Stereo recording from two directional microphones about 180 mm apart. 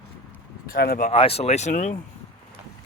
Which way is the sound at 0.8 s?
60° left (ahead or behind).